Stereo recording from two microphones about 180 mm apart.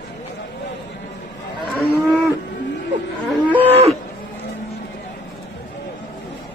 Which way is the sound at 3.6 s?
35° right (ahead or behind).